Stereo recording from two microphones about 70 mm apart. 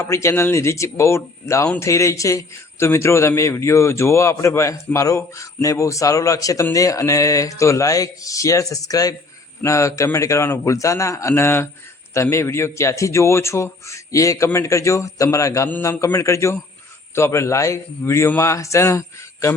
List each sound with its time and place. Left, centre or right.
0.0 s a man's voice: left
9.6 s a man's voice: left